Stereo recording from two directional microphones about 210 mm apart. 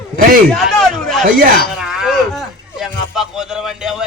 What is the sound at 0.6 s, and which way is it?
A man's voice, centre (ahead or behind).